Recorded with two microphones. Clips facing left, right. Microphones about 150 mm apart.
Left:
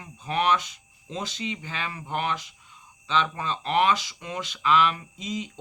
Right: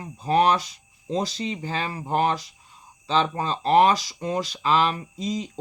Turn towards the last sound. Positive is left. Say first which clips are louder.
# right 4 dB
turn(degrees=-35)  # may be behind; listen again after turning